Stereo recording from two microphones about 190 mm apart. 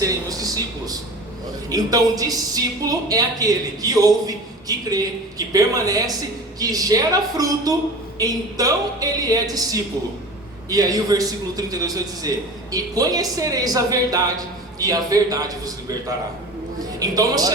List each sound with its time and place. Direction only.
0.0 s a man's voice: 20° right (ahead or behind)